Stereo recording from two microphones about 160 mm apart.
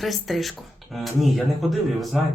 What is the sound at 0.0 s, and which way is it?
Speech, centre (ahead or behind).